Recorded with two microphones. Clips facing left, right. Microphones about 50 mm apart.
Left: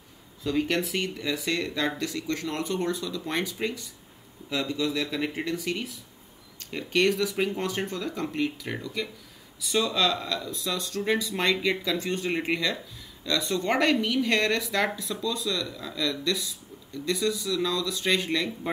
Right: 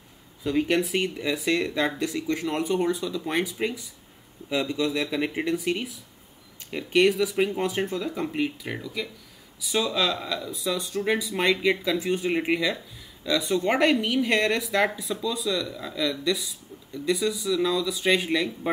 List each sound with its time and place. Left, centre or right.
0.4 s speech: centre
8.7 s speech: centre